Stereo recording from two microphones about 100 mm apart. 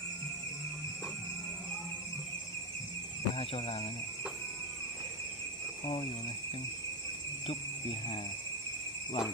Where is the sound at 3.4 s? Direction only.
75° left (ahead or behind).